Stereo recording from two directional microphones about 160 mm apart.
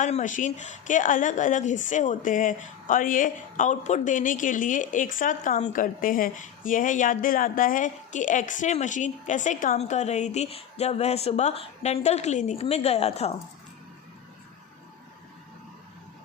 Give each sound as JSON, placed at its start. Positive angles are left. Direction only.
{"t": 0.0, "sound": "a woman's voice", "side_deg": 50}